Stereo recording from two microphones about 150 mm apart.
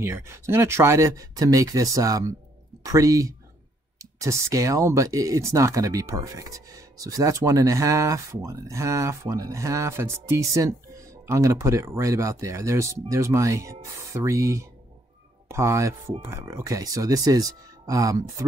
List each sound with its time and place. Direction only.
0.0 s speech: 15° right (ahead or behind)